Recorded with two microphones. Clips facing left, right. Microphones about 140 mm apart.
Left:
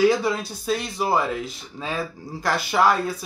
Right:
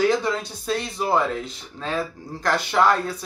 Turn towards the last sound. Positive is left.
turn(degrees=5)  # may be behind; listen again after turning